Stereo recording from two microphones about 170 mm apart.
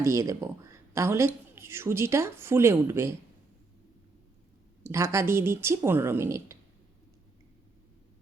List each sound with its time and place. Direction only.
0.0 s a woman's voice: 15° right (ahead or behind)
4.9 s a woman's voice: 15° right (ahead or behind)